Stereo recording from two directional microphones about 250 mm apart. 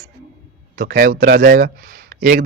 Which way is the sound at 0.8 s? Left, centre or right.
Right.